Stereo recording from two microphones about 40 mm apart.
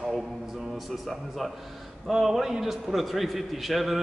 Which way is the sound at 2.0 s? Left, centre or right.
Centre.